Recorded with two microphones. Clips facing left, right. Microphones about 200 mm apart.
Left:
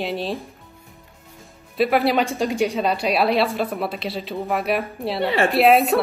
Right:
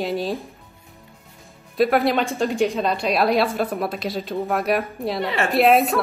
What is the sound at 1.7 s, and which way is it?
A woman's voice, centre (ahead or behind).